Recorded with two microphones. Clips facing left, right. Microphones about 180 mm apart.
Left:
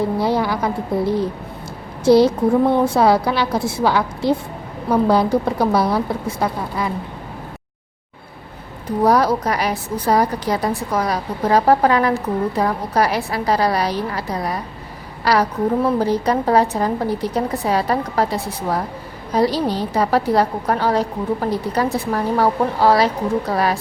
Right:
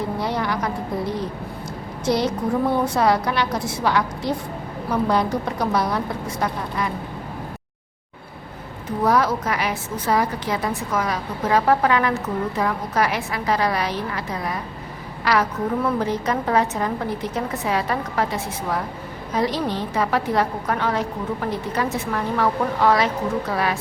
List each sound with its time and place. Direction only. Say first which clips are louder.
0.2 s a woman's voice: left 5 dB; 30° left (ahead or behind)
9.0 s a woman's voice: left 4 dB; 35° left (ahead or behind)